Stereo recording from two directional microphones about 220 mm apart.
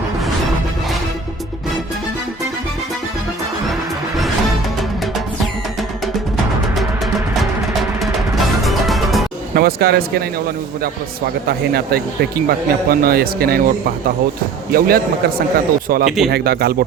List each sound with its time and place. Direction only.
7.8 s music: centre (ahead or behind)
9.6 s speech: 45° right (ahead or behind)
11.4 s speech: 45° right (ahead or behind)